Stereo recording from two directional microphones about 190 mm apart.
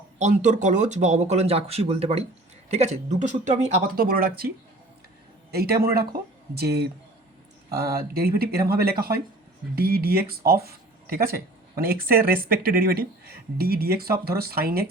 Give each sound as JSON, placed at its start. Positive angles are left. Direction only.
{"t": 0.2, "sound": "a man's voice", "side_deg": -40}